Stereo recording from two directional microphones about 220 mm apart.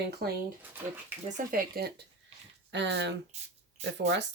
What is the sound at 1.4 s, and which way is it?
Speech, 35° right (ahead or behind).